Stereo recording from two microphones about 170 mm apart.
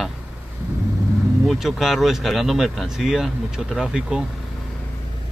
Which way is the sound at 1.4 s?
Centre (ahead or behind).